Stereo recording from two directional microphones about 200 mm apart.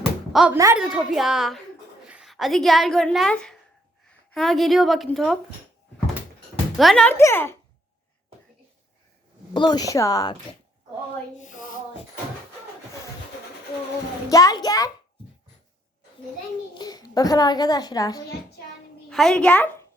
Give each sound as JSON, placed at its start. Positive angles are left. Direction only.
{"t": 0.5, "sound": "a woman's voice", "side_deg": -10}
{"t": 6.7, "sound": "speech", "side_deg": 0}
{"t": 9.5, "sound": "a child's voice", "side_deg": 20}
{"t": 11.3, "sound": "speech", "side_deg": 40}
{"t": 14.3, "sound": "speech", "side_deg": 15}
{"t": 16.7, "sound": "a child's voice", "side_deg": 20}
{"t": 19.0, "sound": "a child's voice", "side_deg": 5}